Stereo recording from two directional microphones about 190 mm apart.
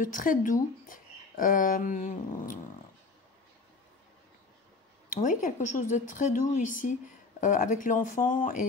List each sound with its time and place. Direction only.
0.0 s a woman's voice: 45° left (ahead or behind)
0.8 s cat: 45° left (ahead or behind)
5.1 s a woman's voice: 40° left (ahead or behind)